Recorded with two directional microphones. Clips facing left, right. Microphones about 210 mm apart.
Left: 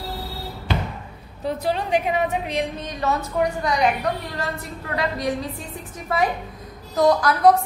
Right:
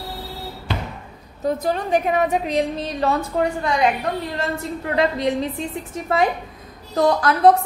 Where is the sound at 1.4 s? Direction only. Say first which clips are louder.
Right 2 dB; 45° right (ahead or behind).